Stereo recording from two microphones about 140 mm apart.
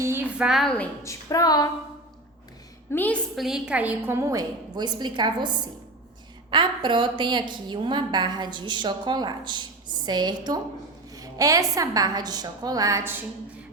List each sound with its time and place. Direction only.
0.0 s a sound: 15° right (ahead or behind); by 0.9 s 5° left (ahead or behind)
1.0 s a woman's voice: 25° left (ahead or behind)
2.9 s a woman's voice: 10° left (ahead or behind)
3.3 s a woman's voice: 5° right (ahead or behind)